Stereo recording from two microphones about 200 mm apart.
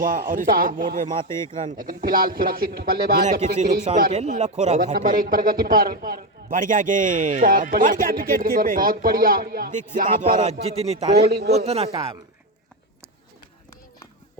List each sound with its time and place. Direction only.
0.0 s speech: 45° right (ahead or behind)
10.4 s a man's voice: 30° right (ahead or behind)
11.2 s speech: 55° right (ahead or behind)
11.5 s a man's voice: 30° right (ahead or behind)